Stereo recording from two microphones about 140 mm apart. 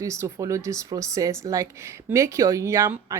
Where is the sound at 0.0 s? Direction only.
20° right (ahead or behind).